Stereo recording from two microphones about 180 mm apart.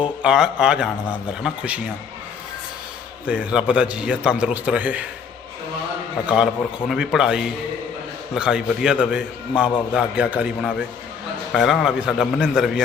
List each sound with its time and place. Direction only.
0.2 s a man's voice: 5° right (ahead or behind)
3.2 s a man's voice: 5° right (ahead or behind)
6.2 s a man's voice: 5° right (ahead or behind)